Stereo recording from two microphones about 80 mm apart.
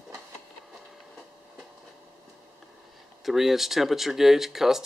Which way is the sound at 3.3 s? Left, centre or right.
Centre.